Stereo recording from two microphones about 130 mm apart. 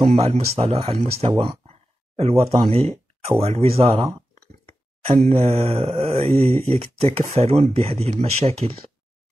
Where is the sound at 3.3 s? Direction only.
45° right (ahead or behind).